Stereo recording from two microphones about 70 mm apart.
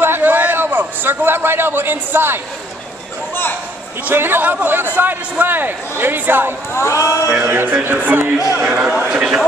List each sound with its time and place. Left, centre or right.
0.0 s a sound: right
4.1 s a man's voice: right
6.7 s a man's voice: left
7.4 s a man's voice: right
8.6 s a man's voice: centre